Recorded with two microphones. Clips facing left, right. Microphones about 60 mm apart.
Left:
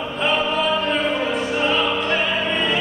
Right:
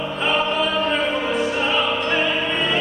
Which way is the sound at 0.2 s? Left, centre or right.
Centre.